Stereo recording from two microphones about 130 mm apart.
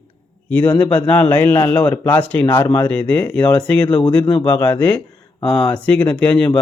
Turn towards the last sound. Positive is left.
turn(degrees=5)  # may be behind; listen again after turning